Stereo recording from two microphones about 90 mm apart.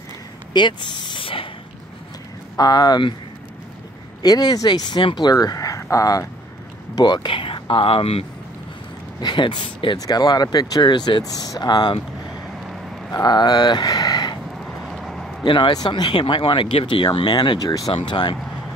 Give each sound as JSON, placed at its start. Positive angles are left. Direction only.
{"t": 0.5, "sound": "speech", "side_deg": 60}
{"t": 2.5, "sound": "speech", "side_deg": 45}
{"t": 4.2, "sound": "speech", "side_deg": 50}
{"t": 5.3, "sound": "speech", "side_deg": 45}
{"t": 7.0, "sound": "speech", "side_deg": 60}
{"t": 9.2, "sound": "speech", "side_deg": 60}
{"t": 9.9, "sound": "speech", "side_deg": 45}
{"t": 13.1, "sound": "speech", "side_deg": 50}
{"t": 14.6, "sound": "vehicle", "side_deg": 0}
{"t": 15.4, "sound": "speech", "side_deg": 65}
{"t": 17.8, "sound": "speech", "side_deg": 75}